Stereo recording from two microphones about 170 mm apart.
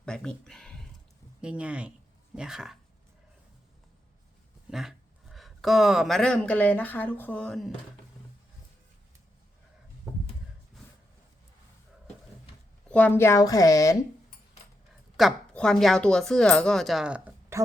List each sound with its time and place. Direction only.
0.0 s speech: 5° left (ahead or behind)
4.7 s speech: centre (ahead or behind)
12.9 s a woman's voice: 10° left (ahead or behind)
15.1 s speech: centre (ahead or behind)